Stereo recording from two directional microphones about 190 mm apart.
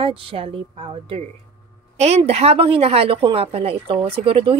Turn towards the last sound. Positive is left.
turn(degrees=-30)  # may be behind; listen again after turning